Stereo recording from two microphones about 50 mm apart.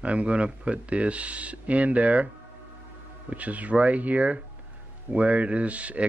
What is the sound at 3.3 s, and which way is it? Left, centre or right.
Speech, right.